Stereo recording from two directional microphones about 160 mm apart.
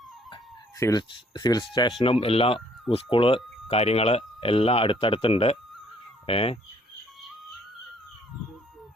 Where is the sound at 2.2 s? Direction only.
35° left (ahead or behind).